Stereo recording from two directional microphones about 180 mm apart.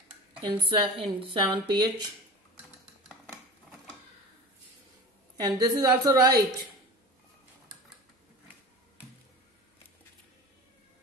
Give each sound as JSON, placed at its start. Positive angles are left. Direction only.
{"t": 0.4, "sound": "speech", "side_deg": -30}
{"t": 5.4, "sound": "speech", "side_deg": -20}